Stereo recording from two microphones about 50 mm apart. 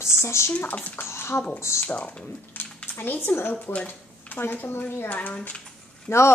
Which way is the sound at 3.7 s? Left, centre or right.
Left.